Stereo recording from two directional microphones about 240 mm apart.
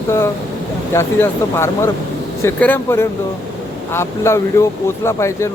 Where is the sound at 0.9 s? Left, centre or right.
Centre.